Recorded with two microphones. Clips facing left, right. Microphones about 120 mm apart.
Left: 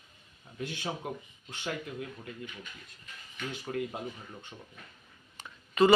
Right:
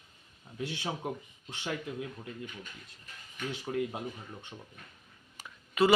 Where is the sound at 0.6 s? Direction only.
20° right (ahead or behind).